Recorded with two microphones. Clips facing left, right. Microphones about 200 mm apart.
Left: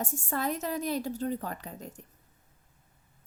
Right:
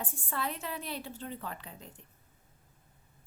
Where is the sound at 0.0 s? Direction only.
45° left (ahead or behind).